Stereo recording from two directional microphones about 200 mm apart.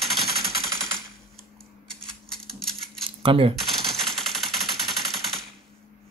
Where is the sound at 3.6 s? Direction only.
Centre (ahead or behind).